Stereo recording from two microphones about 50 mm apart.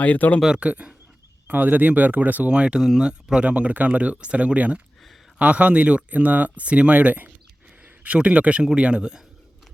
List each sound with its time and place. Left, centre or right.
0.0 s speech: left
0.6 s speech: right
1.5 s speech: right
2.5 s speech: right
3.3 s speech: right